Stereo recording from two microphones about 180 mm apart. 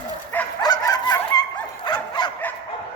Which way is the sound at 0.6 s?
20° left (ahead or behind).